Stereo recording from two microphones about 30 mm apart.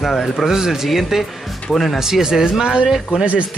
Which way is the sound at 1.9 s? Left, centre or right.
Centre.